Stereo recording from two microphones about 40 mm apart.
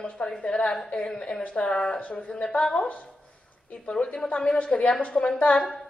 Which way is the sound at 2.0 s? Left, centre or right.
Left.